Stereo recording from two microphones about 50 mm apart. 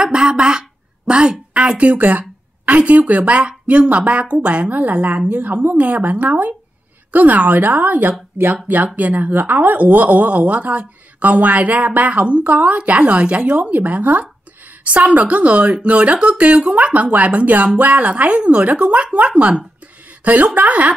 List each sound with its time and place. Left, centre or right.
0.0 s a woman's voice: centre